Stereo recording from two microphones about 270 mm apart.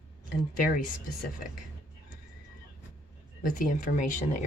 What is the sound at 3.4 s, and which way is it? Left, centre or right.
Speech, left.